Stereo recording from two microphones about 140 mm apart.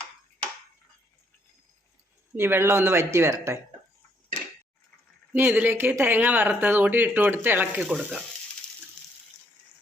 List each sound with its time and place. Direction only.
2.3 s speech: 15° right (ahead or behind)
5.3 s speech: 15° right (ahead or behind)
7.8 s frying: centre (ahead or behind)